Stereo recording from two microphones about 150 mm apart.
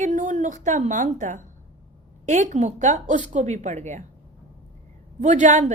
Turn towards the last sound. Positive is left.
turn(degrees=-55)  # may be behind; listen again after turning